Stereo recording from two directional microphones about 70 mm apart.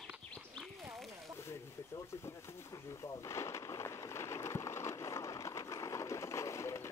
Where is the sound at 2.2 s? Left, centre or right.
Left.